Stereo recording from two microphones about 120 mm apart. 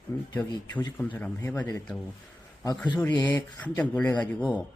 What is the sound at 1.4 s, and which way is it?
Speech, 20° left (ahead or behind).